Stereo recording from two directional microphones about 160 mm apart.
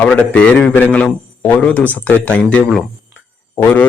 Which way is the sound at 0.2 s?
10° left (ahead or behind).